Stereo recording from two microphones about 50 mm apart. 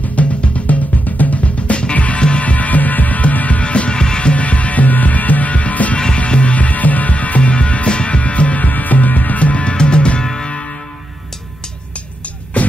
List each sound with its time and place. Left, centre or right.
0.1 s music: left
10.2 s music: centre
12.6 s music: left